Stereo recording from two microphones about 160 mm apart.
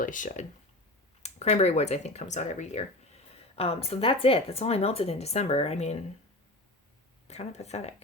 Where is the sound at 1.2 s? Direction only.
40° left (ahead or behind).